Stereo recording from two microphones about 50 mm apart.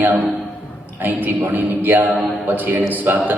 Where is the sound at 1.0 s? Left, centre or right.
Right.